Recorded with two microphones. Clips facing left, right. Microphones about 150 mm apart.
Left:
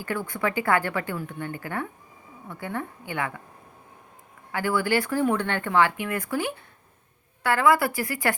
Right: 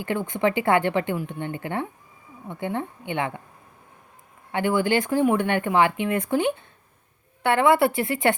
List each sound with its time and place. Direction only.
0.0 s speech: 20° right (ahead or behind)
4.5 s speech: 20° right (ahead or behind)